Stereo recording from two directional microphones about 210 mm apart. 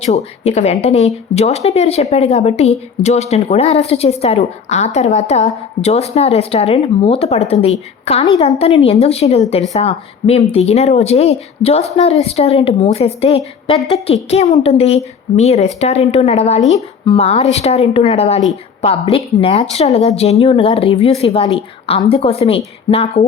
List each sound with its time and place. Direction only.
0.0 s speech: 30° left (ahead or behind)